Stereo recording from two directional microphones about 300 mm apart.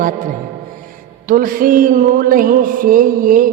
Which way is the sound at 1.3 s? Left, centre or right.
Right.